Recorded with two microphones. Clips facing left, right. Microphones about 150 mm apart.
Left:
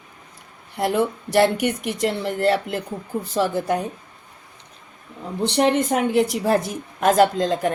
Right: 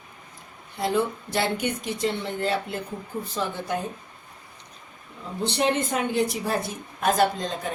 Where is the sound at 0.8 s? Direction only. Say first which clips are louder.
Left 4 dB; 70° left (ahead or behind).